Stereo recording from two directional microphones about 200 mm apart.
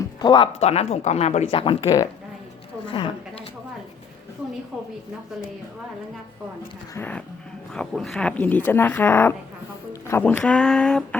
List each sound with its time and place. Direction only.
0.2 s a woman's voice: 25° left (ahead or behind)
6.9 s speech: 10° left (ahead or behind)